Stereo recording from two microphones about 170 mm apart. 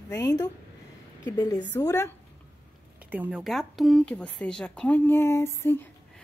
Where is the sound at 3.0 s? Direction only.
10° right (ahead or behind); by 6.2 s 10° left (ahead or behind).